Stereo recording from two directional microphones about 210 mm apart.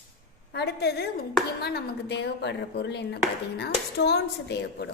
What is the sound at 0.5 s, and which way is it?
A woman's voice, 50° left (ahead or behind).